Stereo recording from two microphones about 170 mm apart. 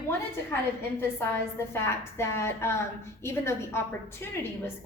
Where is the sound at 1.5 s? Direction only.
15° left (ahead or behind).